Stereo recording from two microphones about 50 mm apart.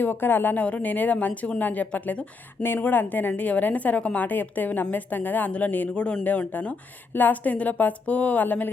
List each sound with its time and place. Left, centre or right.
0.0 s speech: left
0.6 s a woman's voice: left
2.6 s a woman's voice: left